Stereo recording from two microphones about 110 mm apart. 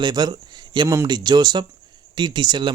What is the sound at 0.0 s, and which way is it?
Speech, 40° right (ahead or behind).